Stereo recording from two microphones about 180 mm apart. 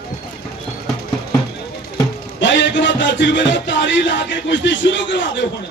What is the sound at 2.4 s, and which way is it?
Music, 80° left.